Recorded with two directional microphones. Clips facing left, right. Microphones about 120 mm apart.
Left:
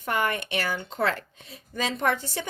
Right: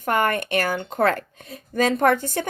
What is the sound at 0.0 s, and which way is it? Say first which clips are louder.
Speech: right 5 dB; 50° right (ahead or behind).